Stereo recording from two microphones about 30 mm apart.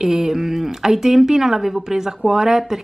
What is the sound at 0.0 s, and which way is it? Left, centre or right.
Speech, centre.